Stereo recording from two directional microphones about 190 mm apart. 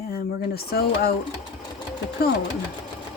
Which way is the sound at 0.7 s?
55° left (ahead or behind).